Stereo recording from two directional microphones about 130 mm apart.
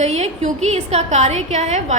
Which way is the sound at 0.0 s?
60° right (ahead or behind).